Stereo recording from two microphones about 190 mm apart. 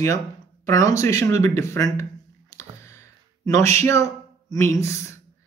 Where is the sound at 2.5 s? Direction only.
15° left (ahead or behind).